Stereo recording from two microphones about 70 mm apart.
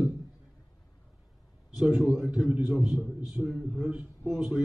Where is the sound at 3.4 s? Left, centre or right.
Centre.